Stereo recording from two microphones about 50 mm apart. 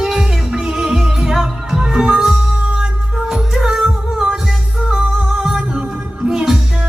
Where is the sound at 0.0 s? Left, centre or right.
Centre.